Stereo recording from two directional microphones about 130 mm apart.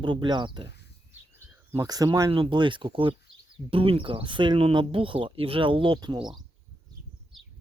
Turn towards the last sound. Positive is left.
turn(degrees=-35)  # may be behind; listen again after turning